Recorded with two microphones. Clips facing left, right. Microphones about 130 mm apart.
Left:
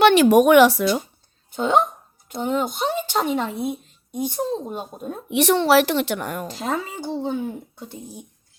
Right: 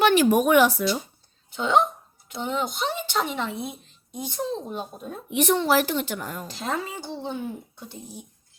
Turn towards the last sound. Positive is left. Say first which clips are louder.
# left 6 dB
turn(degrees=45)  # may be behind; listen again after turning